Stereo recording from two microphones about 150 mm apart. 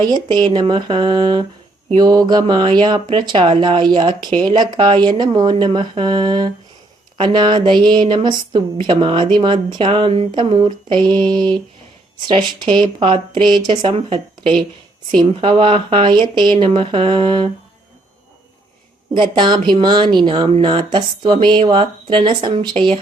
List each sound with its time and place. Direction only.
0.1 s a woman's voice: 30° right (ahead or behind)
19.1 s a woman's voice: 30° right (ahead or behind)